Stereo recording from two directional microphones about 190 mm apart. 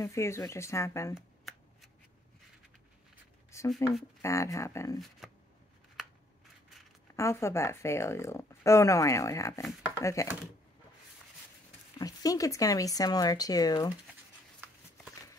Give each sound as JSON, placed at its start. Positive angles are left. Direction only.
{"t": 0.0, "sound": "speech", "side_deg": 15}
{"t": 1.1, "sound": "shuffling cards", "side_deg": 0}
{"t": 3.5, "sound": "a sound", "side_deg": 15}
{"t": 4.2, "sound": "speech", "side_deg": 15}
{"t": 4.9, "sound": "speech", "side_deg": 0}
{"t": 7.2, "sound": "speech", "side_deg": 15}
{"t": 12.0, "sound": "speech", "side_deg": 20}